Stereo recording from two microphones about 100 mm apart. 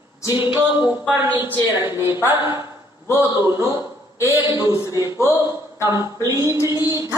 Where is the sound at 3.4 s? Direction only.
25° right (ahead or behind).